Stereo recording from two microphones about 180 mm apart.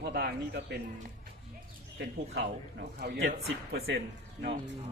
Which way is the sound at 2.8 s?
65° right (ahead or behind).